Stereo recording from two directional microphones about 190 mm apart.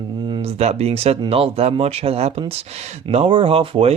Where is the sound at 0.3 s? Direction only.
25° right (ahead or behind).